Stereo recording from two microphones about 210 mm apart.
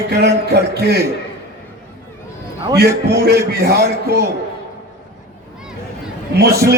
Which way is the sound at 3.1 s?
50° right (ahead or behind).